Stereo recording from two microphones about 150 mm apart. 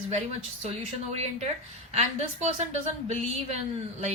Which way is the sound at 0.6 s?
45° right (ahead or behind).